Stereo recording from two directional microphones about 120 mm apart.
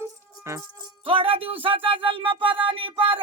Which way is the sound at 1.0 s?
50° right (ahead or behind).